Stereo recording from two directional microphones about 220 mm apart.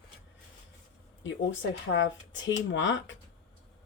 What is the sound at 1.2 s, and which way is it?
Speech, 60° left (ahead or behind).